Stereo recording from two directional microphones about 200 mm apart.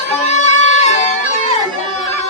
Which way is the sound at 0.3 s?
35° left (ahead or behind).